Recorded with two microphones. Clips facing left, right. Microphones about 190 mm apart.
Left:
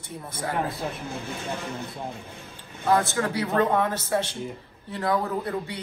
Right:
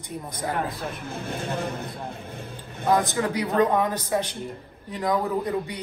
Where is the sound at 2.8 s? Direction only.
15° right (ahead or behind).